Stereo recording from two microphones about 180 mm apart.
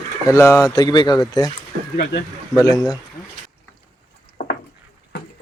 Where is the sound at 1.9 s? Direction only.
65° left (ahead or behind).